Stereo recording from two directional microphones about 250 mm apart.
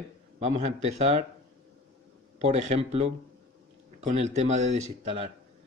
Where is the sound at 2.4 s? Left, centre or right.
Right.